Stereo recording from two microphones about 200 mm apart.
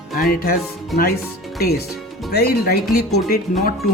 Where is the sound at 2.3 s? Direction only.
50° left (ahead or behind).